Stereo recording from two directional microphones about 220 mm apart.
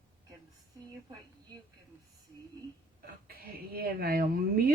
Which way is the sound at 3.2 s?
40° right (ahead or behind).